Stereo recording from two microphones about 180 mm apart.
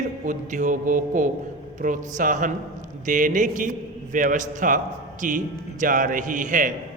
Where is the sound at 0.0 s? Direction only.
45° right (ahead or behind).